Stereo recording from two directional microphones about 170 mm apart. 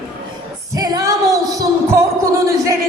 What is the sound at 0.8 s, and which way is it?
Music, 20° right (ahead or behind).